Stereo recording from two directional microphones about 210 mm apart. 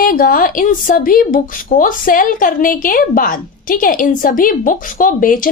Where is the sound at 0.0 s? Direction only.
40° left (ahead or behind).